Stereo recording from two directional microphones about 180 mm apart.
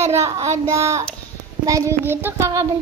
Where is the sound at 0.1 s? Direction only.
15° right (ahead or behind).